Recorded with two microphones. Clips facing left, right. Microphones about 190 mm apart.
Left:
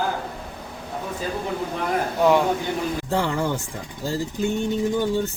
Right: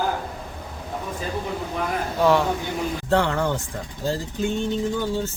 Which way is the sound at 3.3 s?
10° left (ahead or behind).